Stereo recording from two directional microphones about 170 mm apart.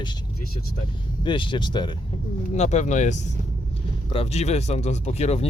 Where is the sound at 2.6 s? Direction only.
45° left (ahead or behind).